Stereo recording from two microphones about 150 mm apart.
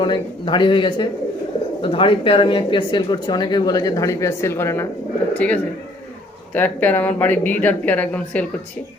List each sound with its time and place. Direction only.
0.0 s speech: 30° left (ahead or behind); by 8.4 s 10° left (ahead or behind)